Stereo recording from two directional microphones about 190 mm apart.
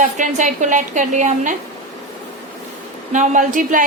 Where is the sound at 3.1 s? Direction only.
40° right (ahead or behind).